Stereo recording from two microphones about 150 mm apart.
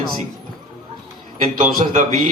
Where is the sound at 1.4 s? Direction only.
60° right (ahead or behind).